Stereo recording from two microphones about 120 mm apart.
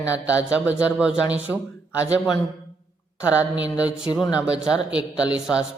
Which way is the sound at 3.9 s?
10° right (ahead or behind).